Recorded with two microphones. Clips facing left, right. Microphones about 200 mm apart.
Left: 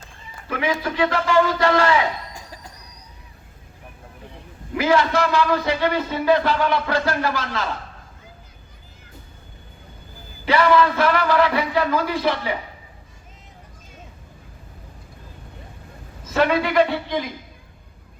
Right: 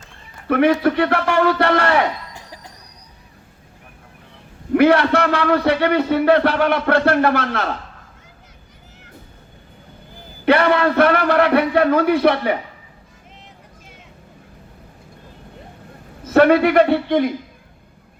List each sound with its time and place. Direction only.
0.4 s a man's voice: 60° right (ahead or behind)
4.7 s a man's voice: 65° right (ahead or behind)
10.4 s a man's voice: 60° right (ahead or behind)
16.2 s a man's voice: 60° right (ahead or behind)